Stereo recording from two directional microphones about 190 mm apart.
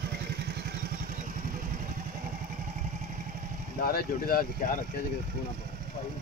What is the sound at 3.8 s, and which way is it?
Speech, 50° left (ahead or behind).